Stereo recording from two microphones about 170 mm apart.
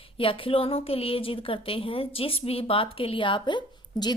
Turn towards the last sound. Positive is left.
turn(degrees=25)  # may be behind; listen again after turning